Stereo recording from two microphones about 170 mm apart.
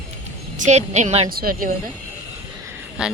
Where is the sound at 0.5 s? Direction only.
45° right (ahead or behind).